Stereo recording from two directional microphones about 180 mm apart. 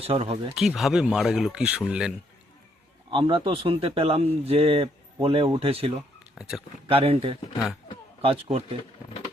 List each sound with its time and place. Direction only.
0.0 s speech: 35° right (ahead or behind)
0.5 s speech: centre (ahead or behind)
3.1 s speech: 30° right (ahead or behind)
6.3 s speech: centre (ahead or behind)
6.8 s speech: 35° right (ahead or behind)